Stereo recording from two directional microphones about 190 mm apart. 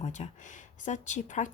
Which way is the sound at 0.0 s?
35° left (ahead or behind).